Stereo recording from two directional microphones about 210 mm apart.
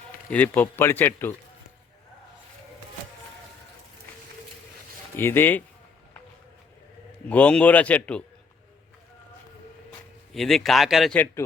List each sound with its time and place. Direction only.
0.3 s speech: 10° left (ahead or behind)
5.1 s speech: 10° left (ahead or behind)
7.3 s speech: 5° left (ahead or behind)
10.3 s a man's voice: centre (ahead or behind)